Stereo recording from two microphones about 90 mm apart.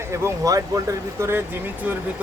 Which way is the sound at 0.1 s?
40° right (ahead or behind).